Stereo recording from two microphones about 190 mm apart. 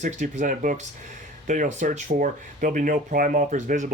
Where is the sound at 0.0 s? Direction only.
40° right (ahead or behind).